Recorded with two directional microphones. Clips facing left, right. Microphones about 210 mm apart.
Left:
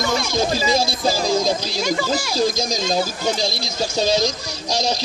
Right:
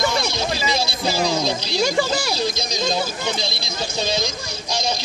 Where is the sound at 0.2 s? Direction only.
45° left (ahead or behind).